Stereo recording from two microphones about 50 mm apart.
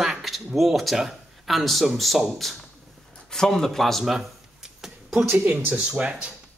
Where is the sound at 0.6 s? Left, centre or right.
Centre.